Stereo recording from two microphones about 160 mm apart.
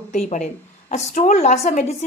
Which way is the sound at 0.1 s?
50° left (ahead or behind).